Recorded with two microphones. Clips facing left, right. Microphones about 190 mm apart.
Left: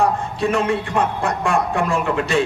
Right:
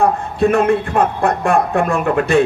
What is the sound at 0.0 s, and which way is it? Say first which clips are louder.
A man's voice: right 4 dB; 55° right (ahead or behind).